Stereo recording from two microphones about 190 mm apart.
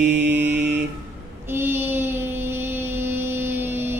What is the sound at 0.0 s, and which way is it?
Mantra, 65° right (ahead or behind).